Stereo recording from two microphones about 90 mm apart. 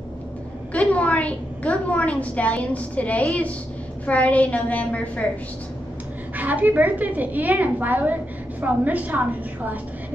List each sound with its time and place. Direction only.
0.7 s a woman's voice: 15° left (ahead or behind)
6.3 s a woman's voice: 20° right (ahead or behind)